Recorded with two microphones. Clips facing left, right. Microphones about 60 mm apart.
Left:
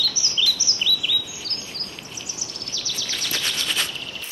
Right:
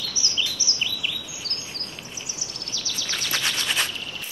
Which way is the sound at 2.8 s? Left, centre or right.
Right.